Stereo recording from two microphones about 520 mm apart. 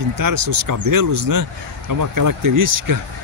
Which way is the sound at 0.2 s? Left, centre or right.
Right.